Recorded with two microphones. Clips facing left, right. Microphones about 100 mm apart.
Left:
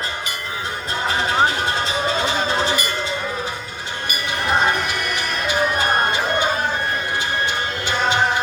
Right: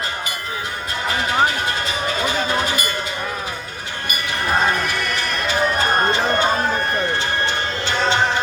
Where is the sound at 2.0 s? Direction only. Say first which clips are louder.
Right 1 dB; 30° left (ahead or behind).